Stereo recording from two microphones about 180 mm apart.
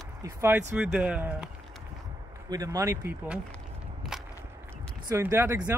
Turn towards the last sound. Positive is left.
turn(degrees=-10)  # may be behind; listen again after turning